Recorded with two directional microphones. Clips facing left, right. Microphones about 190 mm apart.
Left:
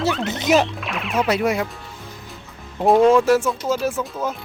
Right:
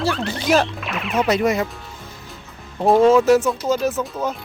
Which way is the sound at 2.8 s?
Centre (ahead or behind).